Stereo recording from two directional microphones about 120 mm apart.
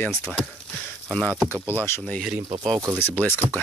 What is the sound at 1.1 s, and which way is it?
Speech, 10° left (ahead or behind).